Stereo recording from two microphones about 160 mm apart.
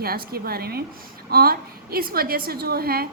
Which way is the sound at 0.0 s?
70° right (ahead or behind).